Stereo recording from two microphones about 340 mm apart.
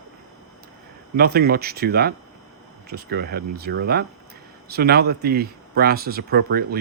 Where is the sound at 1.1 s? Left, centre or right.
Right.